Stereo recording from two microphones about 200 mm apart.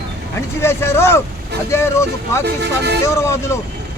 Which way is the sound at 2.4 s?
55° right (ahead or behind).